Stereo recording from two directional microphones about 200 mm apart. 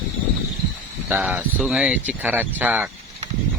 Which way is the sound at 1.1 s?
10° right (ahead or behind).